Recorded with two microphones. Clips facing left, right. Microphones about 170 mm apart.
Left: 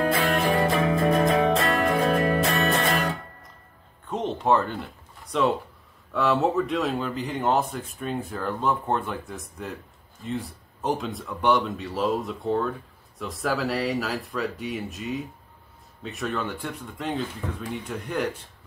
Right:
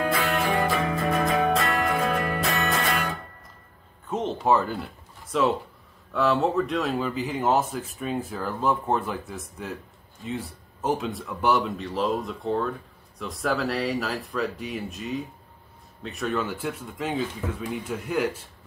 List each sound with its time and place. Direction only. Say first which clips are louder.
0.1 s music: left 2 dB; 30° left (ahead or behind)
4.1 s a sound: even; centre (ahead or behind)
6.1 s speech: even; centre (ahead or behind)